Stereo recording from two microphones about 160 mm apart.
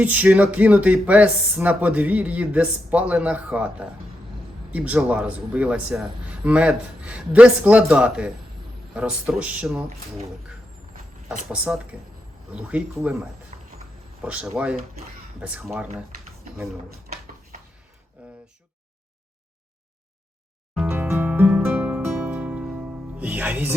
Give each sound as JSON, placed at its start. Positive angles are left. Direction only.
{"t": 0.0, "sound": "speech", "side_deg": -10}
{"t": 11.5, "sound": "speech", "side_deg": -10}
{"t": 13.5, "sound": "a sound", "side_deg": -45}
{"t": 14.3, "sound": "speech", "side_deg": -5}
{"t": 18.2, "sound": "a sound", "side_deg": -10}
{"t": 20.8, "sound": "music", "side_deg": -15}